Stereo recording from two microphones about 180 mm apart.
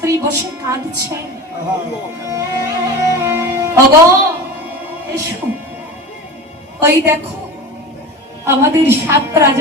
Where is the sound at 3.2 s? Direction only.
15° right (ahead or behind).